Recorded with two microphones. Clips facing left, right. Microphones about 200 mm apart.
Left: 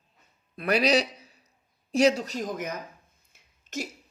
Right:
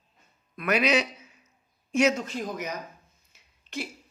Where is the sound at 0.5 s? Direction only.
35° left (ahead or behind).